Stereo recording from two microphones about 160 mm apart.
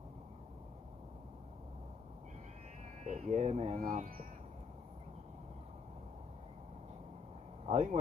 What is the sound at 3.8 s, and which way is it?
Speech, 55° right (ahead or behind).